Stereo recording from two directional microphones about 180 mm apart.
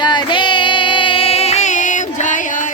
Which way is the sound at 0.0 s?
25° left (ahead or behind).